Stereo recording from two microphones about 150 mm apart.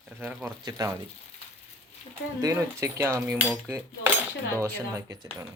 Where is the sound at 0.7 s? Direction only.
25° right (ahead or behind).